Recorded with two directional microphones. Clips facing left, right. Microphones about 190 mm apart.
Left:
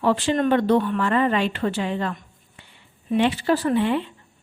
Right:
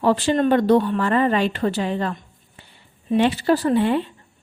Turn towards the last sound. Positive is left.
turn(degrees=-40)  # may be behind; listen again after turning